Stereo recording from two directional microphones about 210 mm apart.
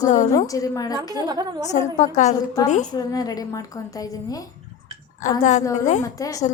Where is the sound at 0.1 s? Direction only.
35° left (ahead or behind).